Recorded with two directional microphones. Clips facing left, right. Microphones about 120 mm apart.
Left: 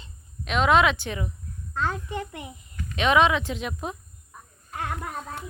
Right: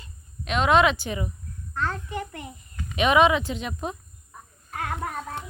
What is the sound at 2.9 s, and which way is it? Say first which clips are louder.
Speech: right 1 dB; 5° right (ahead or behind).